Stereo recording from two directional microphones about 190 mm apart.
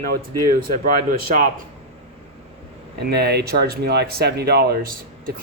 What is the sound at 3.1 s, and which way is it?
Speech, 60° right (ahead or behind).